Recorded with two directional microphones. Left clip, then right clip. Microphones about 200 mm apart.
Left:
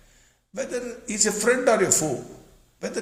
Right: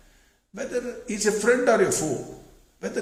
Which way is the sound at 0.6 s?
45° left (ahead or behind).